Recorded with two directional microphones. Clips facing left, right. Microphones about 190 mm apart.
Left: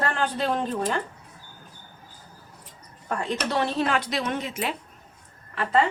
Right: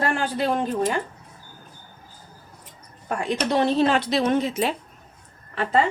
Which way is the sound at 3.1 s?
15° right (ahead or behind).